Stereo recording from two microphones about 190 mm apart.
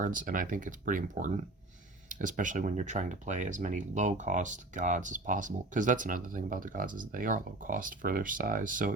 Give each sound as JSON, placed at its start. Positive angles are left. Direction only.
{"t": 0.0, "sound": "speech", "side_deg": -45}